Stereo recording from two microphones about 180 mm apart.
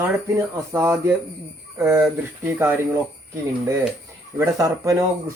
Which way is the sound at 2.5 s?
10° right (ahead or behind).